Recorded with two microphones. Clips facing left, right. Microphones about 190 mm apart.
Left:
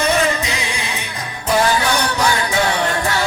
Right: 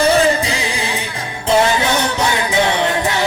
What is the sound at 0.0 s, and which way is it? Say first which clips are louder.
Music: right 4 dB; 30° right (ahead or behind).